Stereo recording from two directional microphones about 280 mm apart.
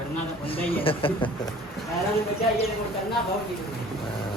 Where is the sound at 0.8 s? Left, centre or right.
Centre.